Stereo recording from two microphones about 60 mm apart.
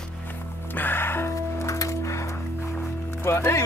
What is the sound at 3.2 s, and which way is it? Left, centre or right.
Speech, left.